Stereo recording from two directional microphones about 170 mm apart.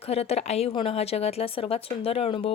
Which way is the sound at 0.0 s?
35° left (ahead or behind).